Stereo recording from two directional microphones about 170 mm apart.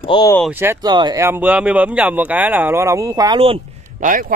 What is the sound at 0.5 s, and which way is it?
Speech, 10° right (ahead or behind).